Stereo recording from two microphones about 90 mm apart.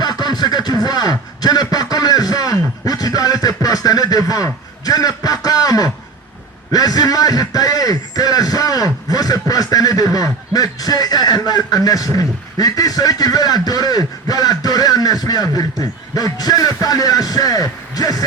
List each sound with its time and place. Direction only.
0.0 s a man's voice: 55° left (ahead or behind)